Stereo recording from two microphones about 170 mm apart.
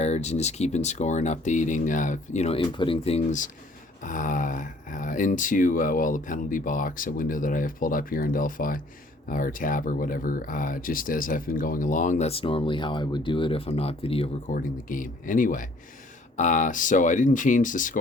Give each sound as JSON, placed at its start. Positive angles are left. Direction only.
{"t": 0.0, "sound": "speech", "side_deg": 40}
{"t": 14.4, "sound": "speech", "side_deg": 50}